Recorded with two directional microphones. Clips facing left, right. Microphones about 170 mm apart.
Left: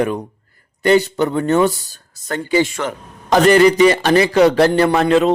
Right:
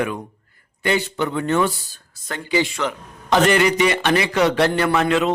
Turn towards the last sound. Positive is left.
turn(degrees=35)  # may be behind; listen again after turning